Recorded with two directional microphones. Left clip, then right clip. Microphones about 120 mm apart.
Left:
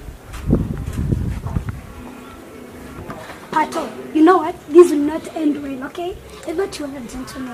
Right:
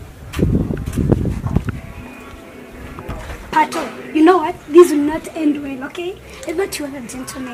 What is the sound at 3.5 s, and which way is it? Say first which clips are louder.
A woman's voice: right 3 dB; 10° right (ahead or behind).